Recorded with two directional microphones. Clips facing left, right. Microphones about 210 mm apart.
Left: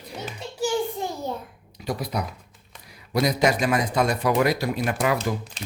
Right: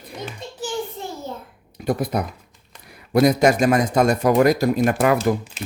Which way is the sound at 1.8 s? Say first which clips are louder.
Right 6 dB; 50° right (ahead or behind).